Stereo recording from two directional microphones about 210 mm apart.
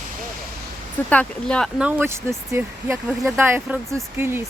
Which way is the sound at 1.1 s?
5° left (ahead or behind).